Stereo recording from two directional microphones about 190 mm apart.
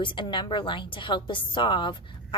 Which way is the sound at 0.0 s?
25° left (ahead or behind).